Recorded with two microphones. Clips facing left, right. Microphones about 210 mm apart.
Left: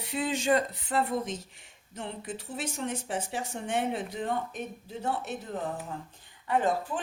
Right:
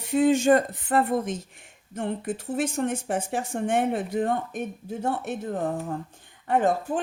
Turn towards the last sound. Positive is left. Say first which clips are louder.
# right 5 dB
turn(degrees=-45)  # may be behind; listen again after turning